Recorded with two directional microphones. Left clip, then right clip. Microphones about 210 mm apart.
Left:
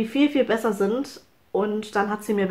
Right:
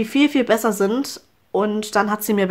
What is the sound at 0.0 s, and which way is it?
Speech, 40° right (ahead or behind).